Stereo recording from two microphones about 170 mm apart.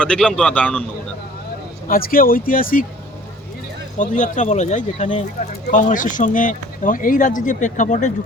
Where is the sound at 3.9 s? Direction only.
45° left (ahead or behind).